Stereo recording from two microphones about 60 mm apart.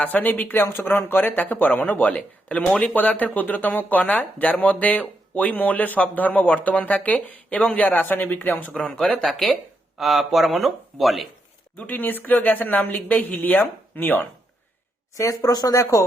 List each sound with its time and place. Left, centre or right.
0.0 s speech: left
8.7 s speech: centre
10.0 s speech: centre
11.8 s speech: left
15.1 s speech: left